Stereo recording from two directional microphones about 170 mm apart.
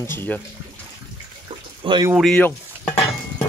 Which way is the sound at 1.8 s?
30° right (ahead or behind).